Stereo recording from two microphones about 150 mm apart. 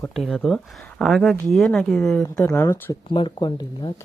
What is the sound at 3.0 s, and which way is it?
Speech, 35° left (ahead or behind).